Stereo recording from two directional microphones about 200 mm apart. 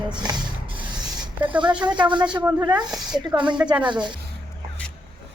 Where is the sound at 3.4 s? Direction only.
5° right (ahead or behind).